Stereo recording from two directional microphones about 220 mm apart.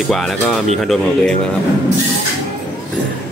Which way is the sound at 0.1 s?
Centre (ahead or behind).